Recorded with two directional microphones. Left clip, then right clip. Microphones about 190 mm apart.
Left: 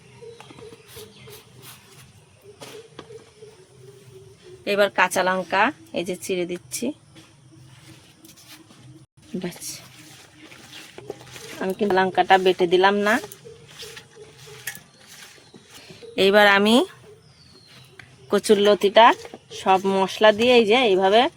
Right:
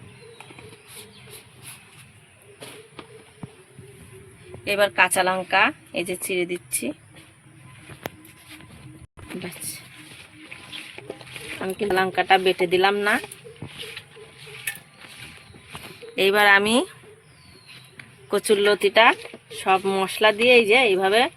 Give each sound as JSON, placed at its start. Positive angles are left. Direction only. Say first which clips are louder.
{"t": 4.6, "sound": "speech", "louder": "even", "side_deg": 65}
{"t": 9.4, "sound": "a sound", "louder": "left 4 dB", "side_deg": 60}
{"t": 11.8, "sound": "speech", "louder": "left 2 dB", "side_deg": 55}
{"t": 15.9, "sound": "speech", "louder": "left 2 dB", "side_deg": 65}
{"t": 17.9, "sound": "speech", "louder": "left 2 dB", "side_deg": 65}